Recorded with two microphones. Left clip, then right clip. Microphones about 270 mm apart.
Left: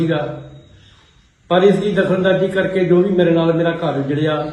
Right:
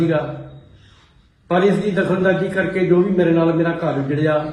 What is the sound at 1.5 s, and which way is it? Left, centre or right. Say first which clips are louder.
A man's voice: left 3 dB; centre.